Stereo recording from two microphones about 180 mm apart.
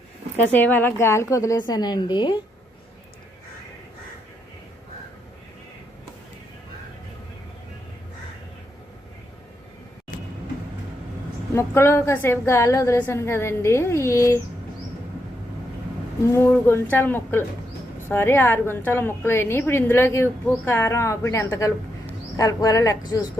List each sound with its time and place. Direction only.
0.5 s a woman's voice: 10° left (ahead or behind)
11.5 s a woman's voice: 15° left (ahead or behind)
16.2 s a woman's voice: 15° left (ahead or behind)